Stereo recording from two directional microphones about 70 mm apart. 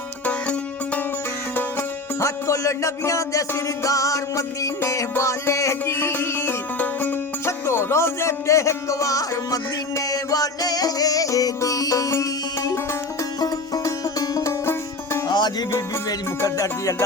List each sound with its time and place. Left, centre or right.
2.1 s music: left
7.4 s music: left
13.4 s music: left
14.6 s music: left
15.3 s music: left